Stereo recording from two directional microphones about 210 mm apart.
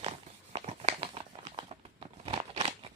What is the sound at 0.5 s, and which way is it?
Crumpling, 30° right (ahead or behind).